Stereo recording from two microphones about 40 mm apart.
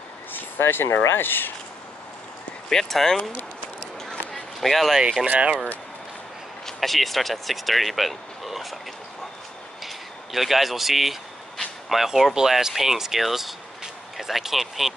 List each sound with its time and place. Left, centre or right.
0.3 s speech: left
2.7 s speech: centre
4.0 s a sound: centre
5.2 s speech: right
6.6 s speech: centre
9.8 s speech: centre